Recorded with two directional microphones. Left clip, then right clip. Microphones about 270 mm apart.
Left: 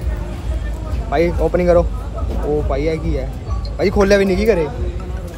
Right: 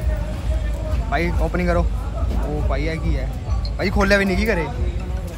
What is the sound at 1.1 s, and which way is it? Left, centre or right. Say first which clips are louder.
A man's voice: left 7 dB; centre.